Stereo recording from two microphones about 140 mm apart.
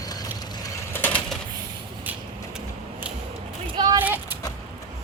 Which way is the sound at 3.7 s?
30° right (ahead or behind).